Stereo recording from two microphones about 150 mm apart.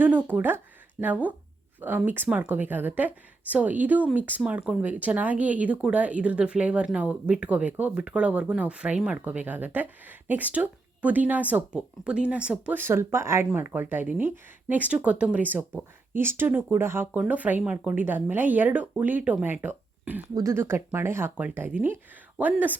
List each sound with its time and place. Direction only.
0.0 s speech: 10° right (ahead or behind)